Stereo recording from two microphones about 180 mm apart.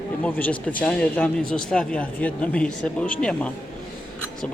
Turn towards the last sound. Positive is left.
turn(degrees=5)  # may be behind; listen again after turning